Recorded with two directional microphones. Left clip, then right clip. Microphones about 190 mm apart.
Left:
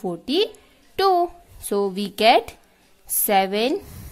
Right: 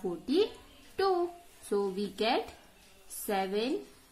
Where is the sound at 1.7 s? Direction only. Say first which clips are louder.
Left 8 dB; 60° left (ahead or behind).